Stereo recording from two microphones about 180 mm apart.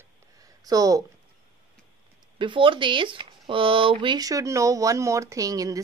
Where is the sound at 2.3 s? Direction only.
30° right (ahead or behind).